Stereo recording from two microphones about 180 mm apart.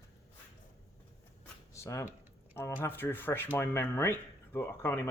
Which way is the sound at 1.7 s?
15° left (ahead or behind).